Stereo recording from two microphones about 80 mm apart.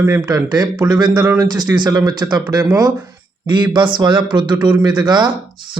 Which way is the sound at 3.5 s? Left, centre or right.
Right.